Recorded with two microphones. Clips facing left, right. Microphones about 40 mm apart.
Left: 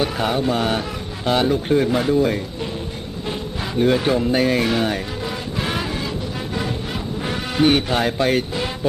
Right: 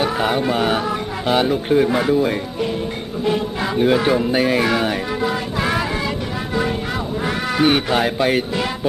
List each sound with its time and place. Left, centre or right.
0.0 s speech: centre
3.8 s speech: centre
5.2 s a sound: right
7.6 s speech: centre